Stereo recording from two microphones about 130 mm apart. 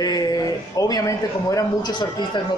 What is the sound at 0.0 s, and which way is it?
A man's voice, 30° left (ahead or behind).